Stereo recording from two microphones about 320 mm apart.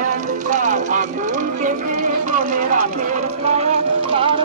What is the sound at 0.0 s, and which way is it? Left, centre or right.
Speech, right.